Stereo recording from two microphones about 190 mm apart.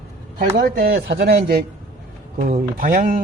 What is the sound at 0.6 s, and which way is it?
Speech, 55° right (ahead or behind).